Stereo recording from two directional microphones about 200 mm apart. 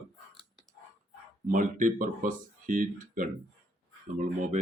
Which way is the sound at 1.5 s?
40° right (ahead or behind).